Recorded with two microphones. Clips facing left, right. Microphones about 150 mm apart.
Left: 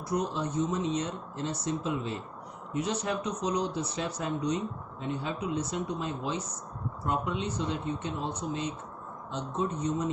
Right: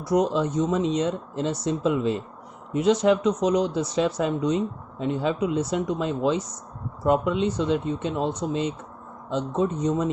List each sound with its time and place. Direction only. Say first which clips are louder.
0.1 s speech: right 9 dB; 90° right